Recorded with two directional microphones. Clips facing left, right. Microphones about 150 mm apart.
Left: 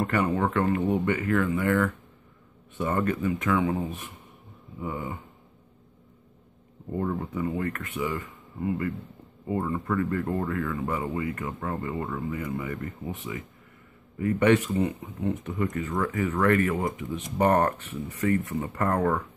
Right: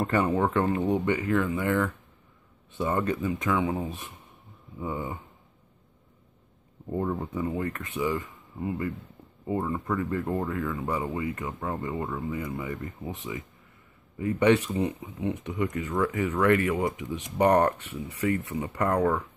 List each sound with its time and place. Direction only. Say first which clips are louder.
0.0 s speech: right 1 dB; 25° right (ahead or behind)
6.9 s speech: even; 15° right (ahead or behind)